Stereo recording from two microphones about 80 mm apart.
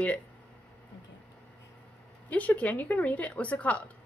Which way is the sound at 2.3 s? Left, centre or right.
Centre.